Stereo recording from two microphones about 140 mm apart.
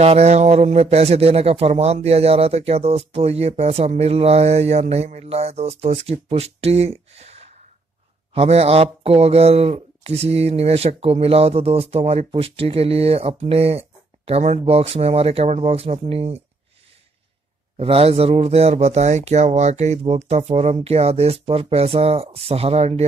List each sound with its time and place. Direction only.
0.0 s speech: 50° right (ahead or behind)
17.7 s speech: 45° right (ahead or behind)